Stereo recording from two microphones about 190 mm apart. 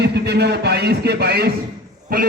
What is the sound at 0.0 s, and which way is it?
A man's voice, 60° right (ahead or behind).